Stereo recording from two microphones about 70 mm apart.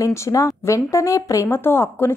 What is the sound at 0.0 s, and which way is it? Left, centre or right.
A woman's voice, left.